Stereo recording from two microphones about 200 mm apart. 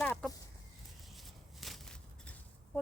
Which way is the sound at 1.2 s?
Centre (ahead or behind).